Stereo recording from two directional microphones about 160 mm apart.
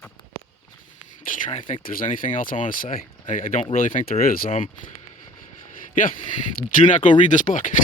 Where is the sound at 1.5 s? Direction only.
50° left (ahead or behind).